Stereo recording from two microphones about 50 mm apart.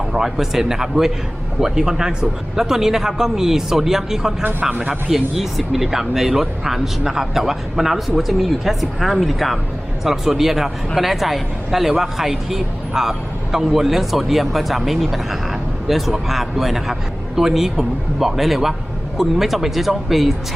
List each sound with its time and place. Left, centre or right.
0.1 s speech: centre
4.8 s speech: right
5.1 s a woman's voice: centre